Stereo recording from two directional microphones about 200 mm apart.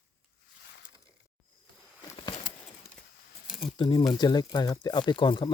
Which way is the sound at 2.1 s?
25° left (ahead or behind).